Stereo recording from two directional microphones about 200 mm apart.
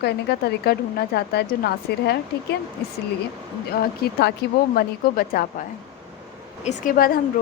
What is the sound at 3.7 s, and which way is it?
A woman's voice, 50° left (ahead or behind).